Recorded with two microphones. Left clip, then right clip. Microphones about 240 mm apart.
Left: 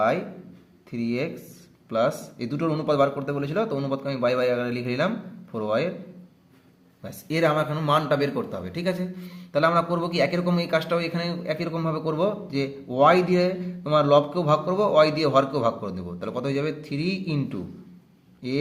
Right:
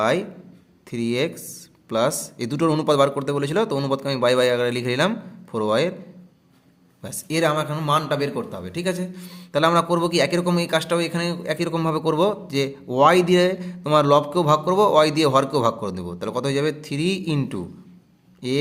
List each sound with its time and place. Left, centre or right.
0.9 s a man's voice: right
7.0 s a man's voice: right